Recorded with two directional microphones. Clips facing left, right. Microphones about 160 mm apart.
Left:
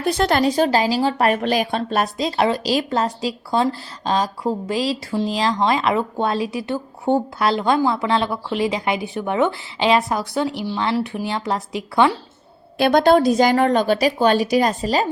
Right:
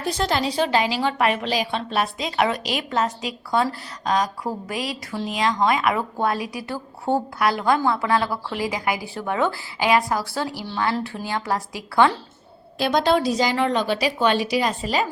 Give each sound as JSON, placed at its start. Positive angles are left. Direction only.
{"t": 0.0, "sound": "a woman's voice", "side_deg": 60}
{"t": 12.8, "sound": "a woman's voice", "side_deg": 50}